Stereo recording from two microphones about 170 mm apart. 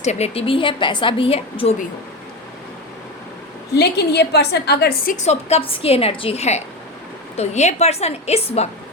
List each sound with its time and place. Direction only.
0.0 s a woman's voice: 40° left (ahead or behind)
3.8 s a woman's voice: 75° left (ahead or behind)
5.1 s a woman's voice: 40° left (ahead or behind)